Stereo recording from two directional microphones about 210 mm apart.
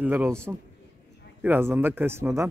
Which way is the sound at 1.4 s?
10° right (ahead or behind).